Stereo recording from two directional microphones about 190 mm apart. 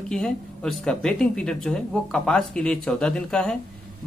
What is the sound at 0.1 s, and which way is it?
A woman's voice, 5° left (ahead or behind).